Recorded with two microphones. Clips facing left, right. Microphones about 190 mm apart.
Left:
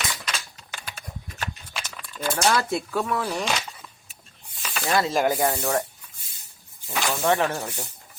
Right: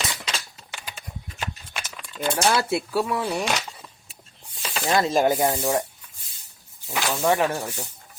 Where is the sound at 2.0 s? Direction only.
20° right (ahead or behind).